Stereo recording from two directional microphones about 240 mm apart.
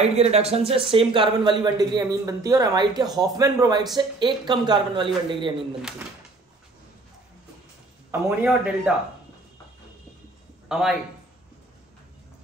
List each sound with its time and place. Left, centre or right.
0.0 s speech: right
5.8 s speech: centre
8.1 s a man's voice: centre
10.7 s a man's voice: centre